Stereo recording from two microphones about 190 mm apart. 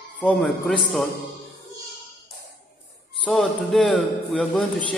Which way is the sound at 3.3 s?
Centre (ahead or behind).